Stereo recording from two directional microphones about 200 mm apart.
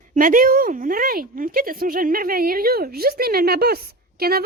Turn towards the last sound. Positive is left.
turn(degrees=-50)  # may be behind; listen again after turning